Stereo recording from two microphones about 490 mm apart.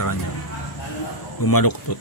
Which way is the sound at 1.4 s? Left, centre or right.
Left.